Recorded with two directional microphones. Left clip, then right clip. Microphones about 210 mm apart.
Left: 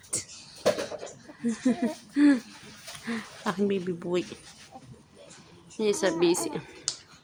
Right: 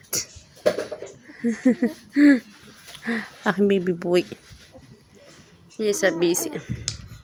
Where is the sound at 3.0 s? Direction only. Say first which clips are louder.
Right 8 dB; 25° right (ahead or behind).